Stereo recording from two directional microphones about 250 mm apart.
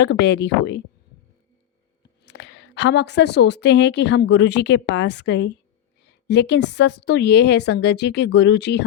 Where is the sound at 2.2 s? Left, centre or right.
Left.